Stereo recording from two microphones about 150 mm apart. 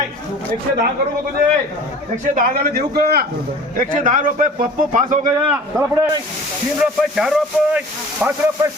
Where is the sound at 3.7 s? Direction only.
60° right (ahead or behind).